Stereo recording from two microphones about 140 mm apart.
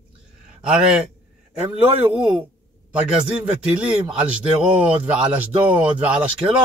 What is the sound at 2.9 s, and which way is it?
A man's voice, 10° right (ahead or behind).